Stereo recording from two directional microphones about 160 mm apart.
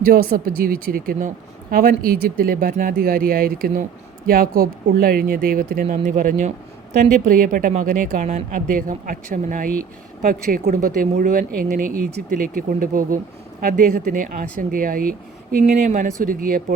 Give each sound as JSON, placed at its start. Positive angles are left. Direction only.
{"t": 0.0, "sound": "speech", "side_deg": -65}